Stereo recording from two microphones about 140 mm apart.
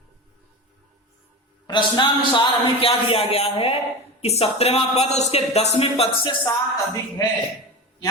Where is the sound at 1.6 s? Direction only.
35° left (ahead or behind).